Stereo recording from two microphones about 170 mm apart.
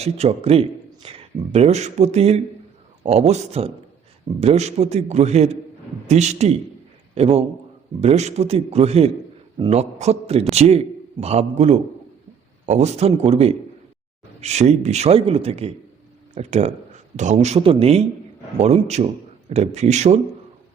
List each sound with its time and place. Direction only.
0.0 s a man's voice: 35° right (ahead or behind)